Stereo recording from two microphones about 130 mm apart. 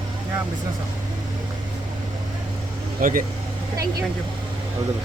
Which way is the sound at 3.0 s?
90° right.